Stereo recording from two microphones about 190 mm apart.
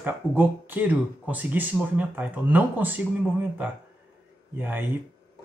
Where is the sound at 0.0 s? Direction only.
10° right (ahead or behind).